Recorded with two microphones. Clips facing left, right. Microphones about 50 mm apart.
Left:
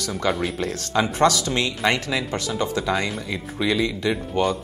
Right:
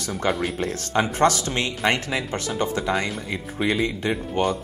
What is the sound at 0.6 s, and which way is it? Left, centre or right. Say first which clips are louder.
Speech: even; right.